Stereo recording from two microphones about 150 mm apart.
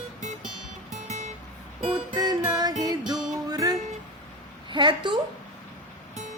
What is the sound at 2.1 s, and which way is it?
Music, 25° right (ahead or behind).